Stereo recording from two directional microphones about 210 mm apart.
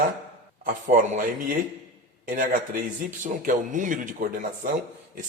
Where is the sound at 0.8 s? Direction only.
40° right (ahead or behind).